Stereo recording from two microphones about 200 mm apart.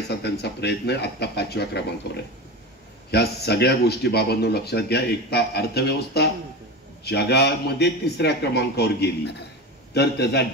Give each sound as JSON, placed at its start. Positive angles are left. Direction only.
{"t": 0.1, "sound": "a man's voice", "side_deg": 55}
{"t": 3.1, "sound": "a man's voice", "side_deg": 55}